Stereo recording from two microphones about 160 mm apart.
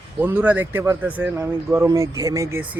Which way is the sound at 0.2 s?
10° right (ahead or behind).